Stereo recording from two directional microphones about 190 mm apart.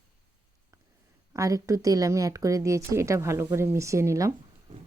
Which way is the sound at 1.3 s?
15° right (ahead or behind).